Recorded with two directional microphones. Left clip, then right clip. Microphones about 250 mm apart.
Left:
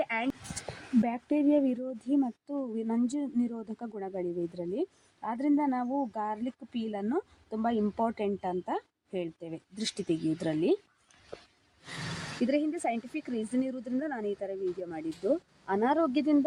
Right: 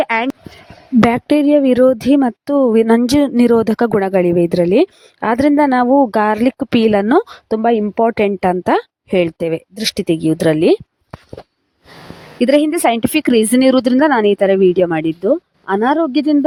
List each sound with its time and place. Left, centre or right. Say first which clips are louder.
0.0 s speech: right 15 dB; right
12.5 s speech: right 18 dB; right